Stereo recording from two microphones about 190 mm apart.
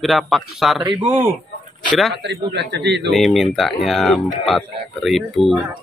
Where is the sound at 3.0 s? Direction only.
Centre (ahead or behind).